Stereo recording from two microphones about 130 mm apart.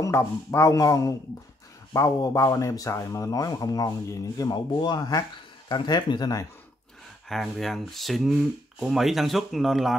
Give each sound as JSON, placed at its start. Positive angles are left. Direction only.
{"t": 0.0, "sound": "speech", "side_deg": 20}
{"t": 7.2, "sound": "speech", "side_deg": 0}